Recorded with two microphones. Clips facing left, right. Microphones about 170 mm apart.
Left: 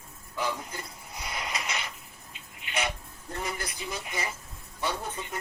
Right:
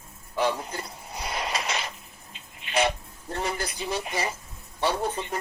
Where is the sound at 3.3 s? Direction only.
30° right (ahead or behind).